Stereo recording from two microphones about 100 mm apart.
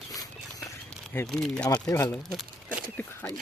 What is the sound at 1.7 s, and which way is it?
Speech, 30° left (ahead or behind).